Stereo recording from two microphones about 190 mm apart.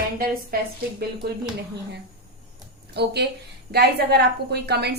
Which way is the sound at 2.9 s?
60° right (ahead or behind).